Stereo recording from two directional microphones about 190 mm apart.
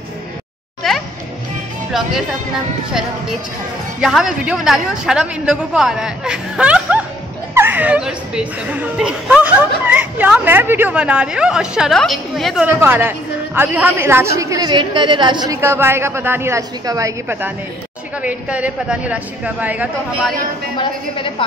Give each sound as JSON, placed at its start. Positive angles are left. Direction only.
{"t": 1.9, "sound": "a woman's voice", "side_deg": 0}
{"t": 4.0, "sound": "a woman's voice", "side_deg": -5}
{"t": 12.6, "sound": "a woman's voice", "side_deg": -10}
{"t": 20.8, "sound": "a woman's voice", "side_deg": 25}